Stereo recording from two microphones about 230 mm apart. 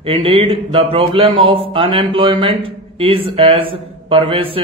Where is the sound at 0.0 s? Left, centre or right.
Right.